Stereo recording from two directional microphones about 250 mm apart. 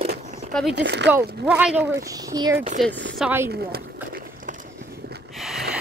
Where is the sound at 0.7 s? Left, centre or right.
Right.